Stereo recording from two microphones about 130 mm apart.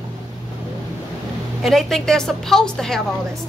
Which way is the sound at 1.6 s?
Centre (ahead or behind).